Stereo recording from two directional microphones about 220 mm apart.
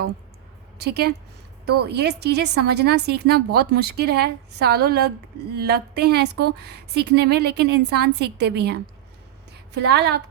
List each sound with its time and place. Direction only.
0.8 s a woman's voice: 45° right (ahead or behind)